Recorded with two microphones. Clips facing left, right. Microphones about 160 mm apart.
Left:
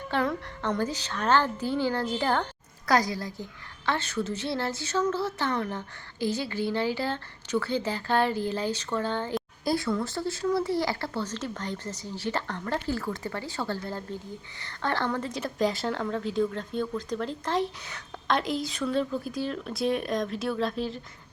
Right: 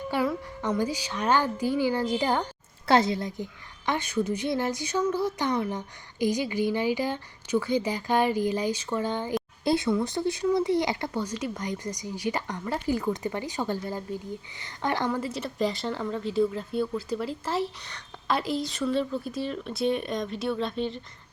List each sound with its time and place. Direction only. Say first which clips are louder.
0.1 s a woman's voice: even; 10° right (ahead or behind)
2.8 s a woman's voice: right 3 dB; 25° right (ahead or behind); by 21.0 s centre (ahead or behind)